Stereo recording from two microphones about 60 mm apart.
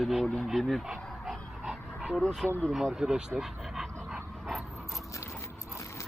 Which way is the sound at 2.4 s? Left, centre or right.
Right.